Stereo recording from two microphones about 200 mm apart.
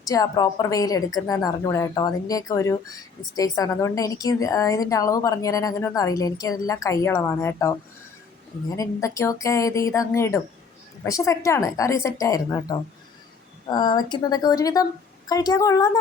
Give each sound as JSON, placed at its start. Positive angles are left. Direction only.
{"t": 0.0, "sound": "a woman's voice", "side_deg": 20}